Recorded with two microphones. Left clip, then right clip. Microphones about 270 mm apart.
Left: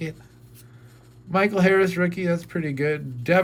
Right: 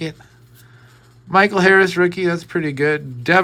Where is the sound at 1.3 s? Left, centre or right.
Centre.